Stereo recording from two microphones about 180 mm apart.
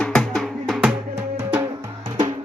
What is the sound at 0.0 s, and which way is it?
Music, 5° left (ahead or behind).